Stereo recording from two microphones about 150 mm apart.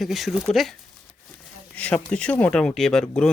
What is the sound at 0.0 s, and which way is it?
Speech, centre (ahead or behind).